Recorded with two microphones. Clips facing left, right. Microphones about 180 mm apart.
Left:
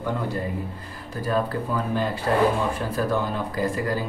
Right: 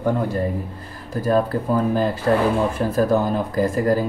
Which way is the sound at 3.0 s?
40° right (ahead or behind).